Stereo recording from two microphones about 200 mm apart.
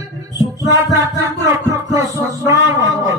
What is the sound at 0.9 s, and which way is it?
Music, 15° right (ahead or behind).